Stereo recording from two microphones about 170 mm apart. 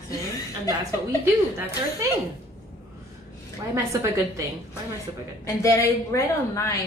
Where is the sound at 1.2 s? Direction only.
15° right (ahead or behind).